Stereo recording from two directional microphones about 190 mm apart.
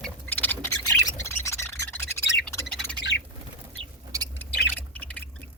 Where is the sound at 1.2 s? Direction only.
15° left (ahead or behind).